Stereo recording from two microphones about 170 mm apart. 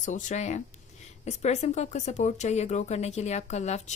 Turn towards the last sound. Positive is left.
turn(degrees=40)  # may be behind; listen again after turning